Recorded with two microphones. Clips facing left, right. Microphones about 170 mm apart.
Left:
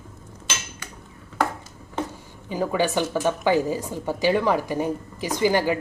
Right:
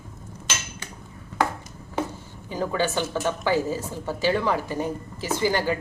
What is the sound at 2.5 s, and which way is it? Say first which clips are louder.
A woman's voice: left 2 dB; 15° left (ahead or behind).